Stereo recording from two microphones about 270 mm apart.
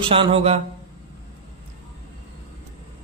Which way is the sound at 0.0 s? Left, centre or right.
Centre.